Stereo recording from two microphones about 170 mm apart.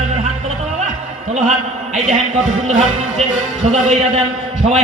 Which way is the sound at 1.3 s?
45° right (ahead or behind).